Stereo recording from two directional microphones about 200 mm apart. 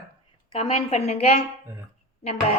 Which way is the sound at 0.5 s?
30° left (ahead or behind).